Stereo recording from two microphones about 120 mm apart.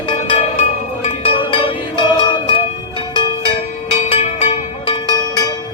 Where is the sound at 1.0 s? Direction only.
50° left (ahead or behind).